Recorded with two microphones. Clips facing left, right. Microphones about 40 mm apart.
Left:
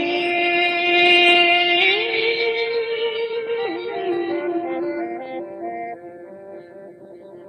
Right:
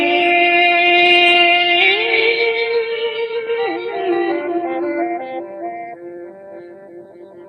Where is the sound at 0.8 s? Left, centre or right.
Centre.